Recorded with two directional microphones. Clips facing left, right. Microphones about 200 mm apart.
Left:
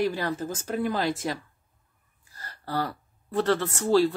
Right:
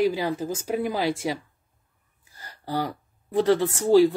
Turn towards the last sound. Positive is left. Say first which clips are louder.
# right 4 dB
turn(degrees=-15)  # may be behind; listen again after turning